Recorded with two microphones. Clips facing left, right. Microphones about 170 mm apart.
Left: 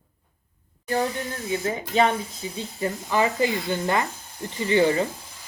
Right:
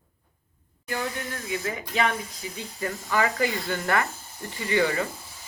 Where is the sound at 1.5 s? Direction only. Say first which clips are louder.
Left 5 dB; 30° left (ahead or behind).